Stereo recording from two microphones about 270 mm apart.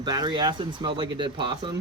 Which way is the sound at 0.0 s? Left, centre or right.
Centre.